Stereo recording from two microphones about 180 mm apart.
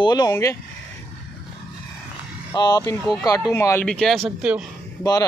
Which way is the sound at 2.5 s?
20° left (ahead or behind).